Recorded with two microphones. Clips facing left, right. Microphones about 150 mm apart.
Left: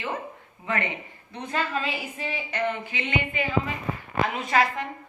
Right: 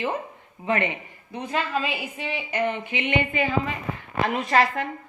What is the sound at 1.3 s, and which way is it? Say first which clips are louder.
A woman's voice: right 2 dB; 5° right (ahead or behind).